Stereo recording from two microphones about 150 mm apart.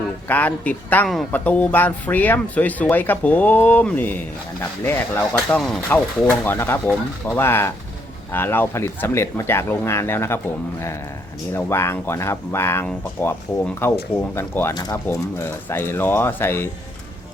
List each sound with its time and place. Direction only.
0.3 s speech: 10° left (ahead or behind)
11.5 s speech: 15° left (ahead or behind)